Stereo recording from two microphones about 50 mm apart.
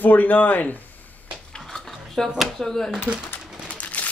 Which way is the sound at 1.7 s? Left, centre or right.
Centre.